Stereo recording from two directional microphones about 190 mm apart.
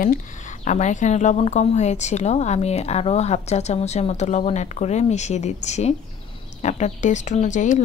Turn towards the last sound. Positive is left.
turn(degrees=40)  # may be behind; listen again after turning